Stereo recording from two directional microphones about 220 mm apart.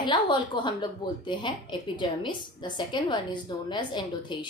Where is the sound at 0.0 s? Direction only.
20° left (ahead or behind).